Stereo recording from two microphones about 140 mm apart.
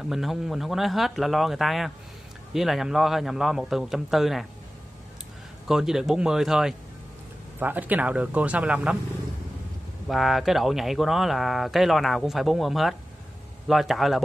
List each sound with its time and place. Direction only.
0.1 s speech: centre (ahead or behind)
5.7 s speech: 5° right (ahead or behind)
10.0 s speech: centre (ahead or behind)